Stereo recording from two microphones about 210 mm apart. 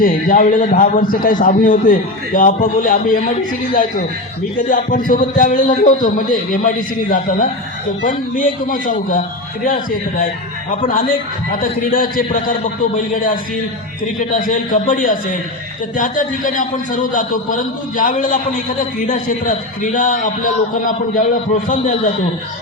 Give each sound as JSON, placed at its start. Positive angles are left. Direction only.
{"t": 0.0, "sound": "a man's voice", "side_deg": 40}
{"t": 4.7, "sound": "a man's voice", "side_deg": 40}
{"t": 21.7, "sound": "a man's voice", "side_deg": 35}